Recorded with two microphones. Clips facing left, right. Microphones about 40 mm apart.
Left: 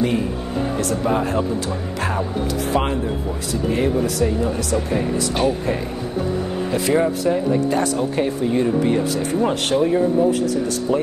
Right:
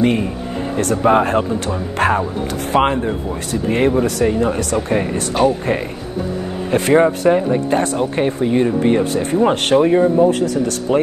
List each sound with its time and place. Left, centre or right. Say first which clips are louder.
0.7 s speech: right 8 dB; right
6.7 s speech: right 6 dB; right
8.5 s speech: right 3 dB; right